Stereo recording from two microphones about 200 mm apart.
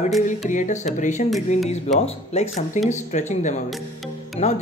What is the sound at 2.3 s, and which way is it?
Speech, 35° left (ahead or behind).